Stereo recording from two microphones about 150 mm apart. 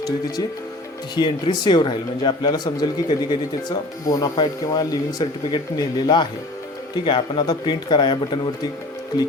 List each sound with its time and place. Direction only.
1.1 s a man's voice: 30° left (ahead or behind)